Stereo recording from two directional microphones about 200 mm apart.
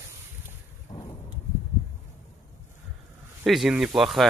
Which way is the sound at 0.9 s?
30° left (ahead or behind).